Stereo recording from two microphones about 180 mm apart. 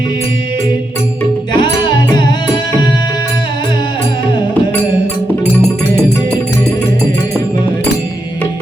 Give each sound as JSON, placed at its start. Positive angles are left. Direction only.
{"t": 1.5, "sound": "music", "side_deg": 25}